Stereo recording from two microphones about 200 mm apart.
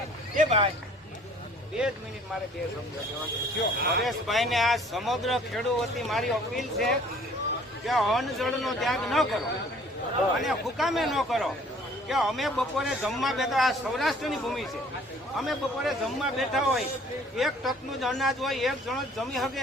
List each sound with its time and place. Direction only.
0.3 s a man's voice: 30° right (ahead or behind)
3.8 s speech: 55° right (ahead or behind)
4.0 s speech: centre (ahead or behind)
10.4 s speech: centre (ahead or behind)